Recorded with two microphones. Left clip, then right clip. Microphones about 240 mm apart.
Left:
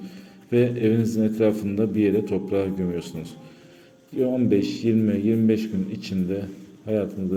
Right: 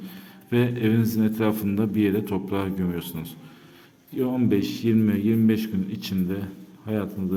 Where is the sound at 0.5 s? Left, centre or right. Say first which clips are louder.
Left 3 dB; centre.